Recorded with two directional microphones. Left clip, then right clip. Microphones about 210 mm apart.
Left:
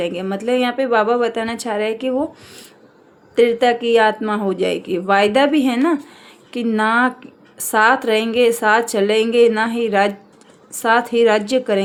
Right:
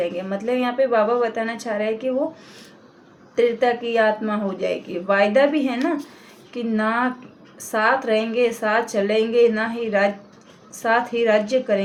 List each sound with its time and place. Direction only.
0.0 s speech: 50° left (ahead or behind)
3.3 s a woman's voice: 55° left (ahead or behind)